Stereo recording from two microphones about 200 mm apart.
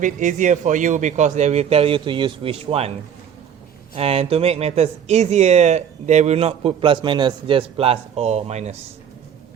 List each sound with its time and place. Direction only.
0.0 s speech: 40° right (ahead or behind)
3.9 s speech: 30° right (ahead or behind)